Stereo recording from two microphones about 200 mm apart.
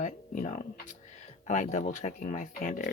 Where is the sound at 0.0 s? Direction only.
40° left (ahead or behind).